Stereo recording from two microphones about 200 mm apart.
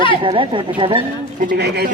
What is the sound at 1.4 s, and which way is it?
Speech, 50° right (ahead or behind).